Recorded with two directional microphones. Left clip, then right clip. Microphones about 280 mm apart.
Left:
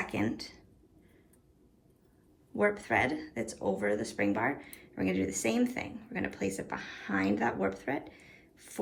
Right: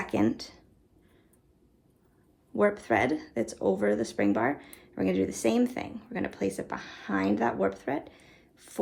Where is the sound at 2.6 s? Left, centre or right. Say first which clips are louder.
Right 3 dB; centre.